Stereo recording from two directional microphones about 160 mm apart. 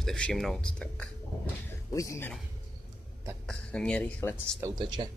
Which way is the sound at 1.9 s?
20° left (ahead or behind).